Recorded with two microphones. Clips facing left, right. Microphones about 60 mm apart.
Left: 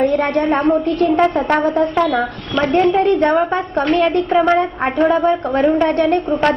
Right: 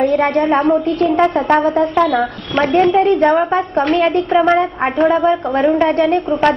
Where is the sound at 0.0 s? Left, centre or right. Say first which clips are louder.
Right 2 dB; centre.